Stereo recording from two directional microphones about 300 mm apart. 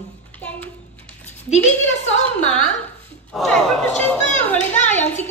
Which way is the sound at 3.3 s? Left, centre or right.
Centre.